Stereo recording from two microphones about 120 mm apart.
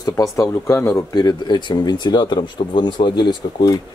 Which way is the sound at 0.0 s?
30° left (ahead or behind).